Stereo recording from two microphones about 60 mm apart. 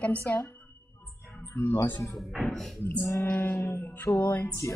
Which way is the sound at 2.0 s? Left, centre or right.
Centre.